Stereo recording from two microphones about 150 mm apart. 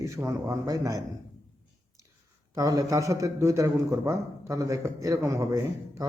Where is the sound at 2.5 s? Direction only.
20° right (ahead or behind).